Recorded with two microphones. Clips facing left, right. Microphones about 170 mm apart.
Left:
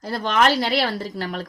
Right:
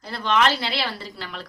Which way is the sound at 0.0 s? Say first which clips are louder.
Left 2 dB; 45° left (ahead or behind).